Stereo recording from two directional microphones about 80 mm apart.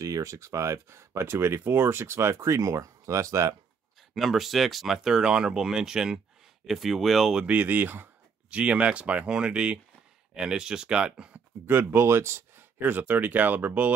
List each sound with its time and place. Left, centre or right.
0.0 s speech: right
4.1 s speech: centre
7.4 s speech: right
11.8 s speech: right